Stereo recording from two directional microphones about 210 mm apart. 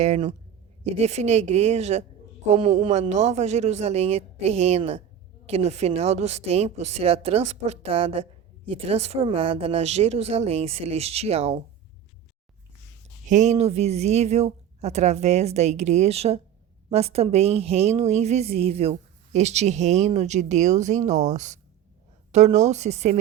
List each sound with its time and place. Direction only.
0.0 s a woman's voice: 35° right (ahead or behind)
13.2 s a woman's voice: 35° right (ahead or behind)